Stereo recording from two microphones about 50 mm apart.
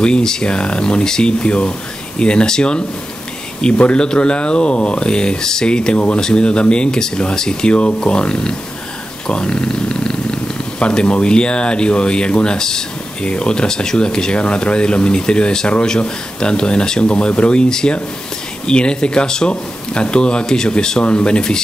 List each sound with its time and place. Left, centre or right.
0.0 s speech: centre